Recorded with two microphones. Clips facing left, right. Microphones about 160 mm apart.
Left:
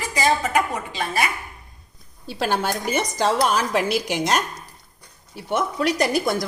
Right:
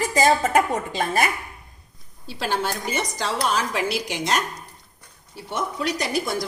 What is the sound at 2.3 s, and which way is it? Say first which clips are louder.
A woman's voice: left 2 dB; 50° left (ahead or behind).